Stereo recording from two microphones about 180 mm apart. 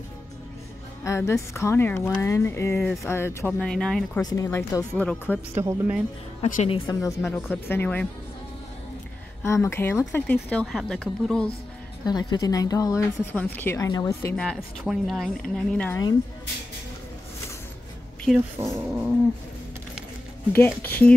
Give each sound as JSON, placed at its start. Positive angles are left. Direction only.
{"t": 1.0, "sound": "speech", "side_deg": 15}
{"t": 4.2, "sound": "speech", "side_deg": 20}
{"t": 5.5, "sound": "speech", "side_deg": -15}
{"t": 6.4, "sound": "a woman's voice", "side_deg": 35}
{"t": 6.9, "sound": "speech", "side_deg": 20}
{"t": 7.2, "sound": "speech", "side_deg": 5}
{"t": 9.4, "sound": "speech", "side_deg": 15}
{"t": 12.1, "sound": "speech", "side_deg": 20}
{"t": 14.3, "sound": "speech", "side_deg": 5}
{"t": 18.6, "sound": "speech", "side_deg": -15}
{"t": 20.5, "sound": "speech", "side_deg": 10}